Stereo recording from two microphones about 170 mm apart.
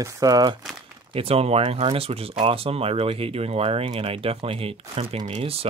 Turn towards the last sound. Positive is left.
turn(degrees=-35)  # may be behind; listen again after turning